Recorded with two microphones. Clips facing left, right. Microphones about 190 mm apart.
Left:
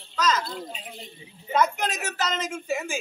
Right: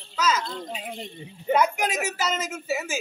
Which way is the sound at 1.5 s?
10° right (ahead or behind).